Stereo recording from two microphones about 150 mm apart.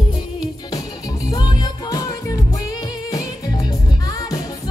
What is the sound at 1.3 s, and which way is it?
Music, 25° left (ahead or behind).